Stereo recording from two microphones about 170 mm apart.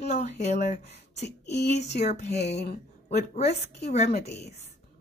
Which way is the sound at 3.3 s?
40° left (ahead or behind).